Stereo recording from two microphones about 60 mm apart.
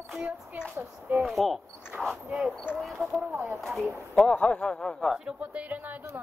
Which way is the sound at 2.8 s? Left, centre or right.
Centre.